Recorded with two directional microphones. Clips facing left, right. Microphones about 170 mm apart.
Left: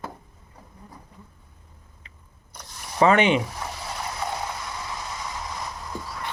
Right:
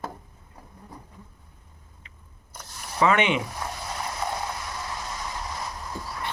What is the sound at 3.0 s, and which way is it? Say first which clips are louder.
Speech: left 4 dB; 35° left (ahead or behind).